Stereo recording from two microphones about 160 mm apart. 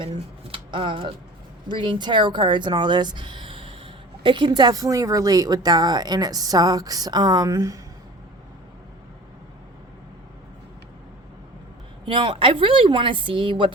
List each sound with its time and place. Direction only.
0.0 s a woman's voice: 35° right (ahead or behind)
12.0 s speech: 30° right (ahead or behind)